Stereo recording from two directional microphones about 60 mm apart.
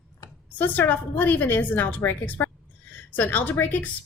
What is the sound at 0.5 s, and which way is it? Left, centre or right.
A woman's voice, left.